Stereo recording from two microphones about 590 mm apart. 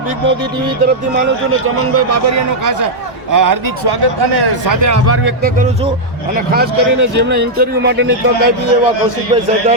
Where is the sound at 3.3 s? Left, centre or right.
Right; by 8.1 s centre.